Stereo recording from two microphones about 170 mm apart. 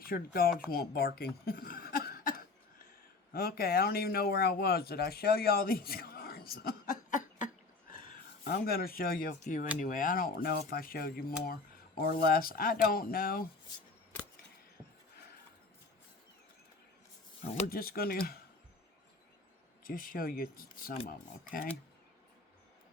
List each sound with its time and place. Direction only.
0.0 s speech: 60° left (ahead or behind)
8.4 s speech: 65° left (ahead or behind)
17.5 s speech: 55° left (ahead or behind)
19.8 s speech: 55° left (ahead or behind)